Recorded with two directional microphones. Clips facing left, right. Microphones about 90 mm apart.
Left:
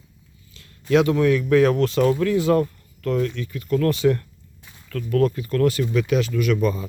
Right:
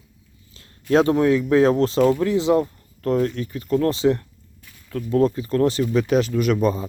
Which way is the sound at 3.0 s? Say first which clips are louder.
Right 2 dB; 35° right (ahead or behind).